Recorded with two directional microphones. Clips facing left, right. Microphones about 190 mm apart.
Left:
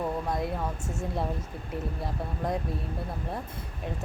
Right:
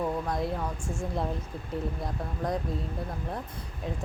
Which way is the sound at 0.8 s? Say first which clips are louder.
Even; 20° left (ahead or behind).